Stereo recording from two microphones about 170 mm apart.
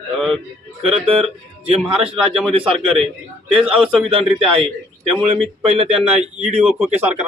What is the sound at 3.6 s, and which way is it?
Speech, 5° right (ahead or behind).